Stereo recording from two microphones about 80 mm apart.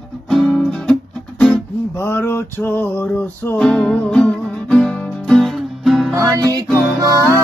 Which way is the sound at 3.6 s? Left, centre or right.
Centre.